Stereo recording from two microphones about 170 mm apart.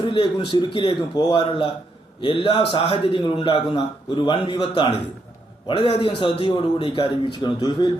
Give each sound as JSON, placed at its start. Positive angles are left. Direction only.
{"t": 0.0, "sound": "a man's voice", "side_deg": 30}